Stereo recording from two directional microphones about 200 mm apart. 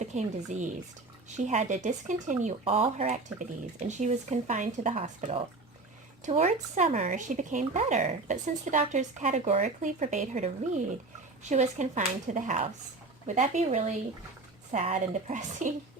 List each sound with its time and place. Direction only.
0.0 s speech: 35° right (ahead or behind)